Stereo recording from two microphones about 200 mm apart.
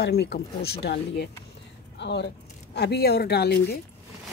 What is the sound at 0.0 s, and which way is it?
Speech, 55° left (ahead or behind).